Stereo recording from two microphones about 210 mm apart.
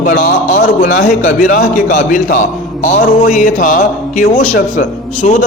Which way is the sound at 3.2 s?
40° left (ahead or behind).